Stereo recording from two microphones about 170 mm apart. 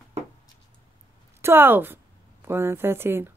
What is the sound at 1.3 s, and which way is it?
A woman's voice, 15° right (ahead or behind).